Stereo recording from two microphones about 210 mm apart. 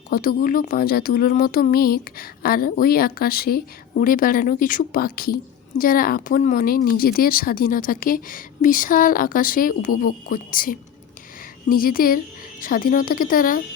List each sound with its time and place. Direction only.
0.1 s speech: 45° left (ahead or behind)